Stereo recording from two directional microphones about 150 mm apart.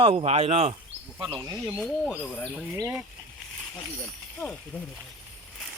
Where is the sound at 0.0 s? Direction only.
40° right (ahead or behind).